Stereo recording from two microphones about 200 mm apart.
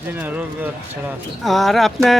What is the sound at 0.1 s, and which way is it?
Speech, 10° right (ahead or behind).